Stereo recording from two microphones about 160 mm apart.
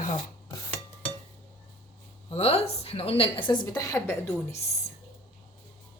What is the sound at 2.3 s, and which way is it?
A woman's voice, 40° left (ahead or behind).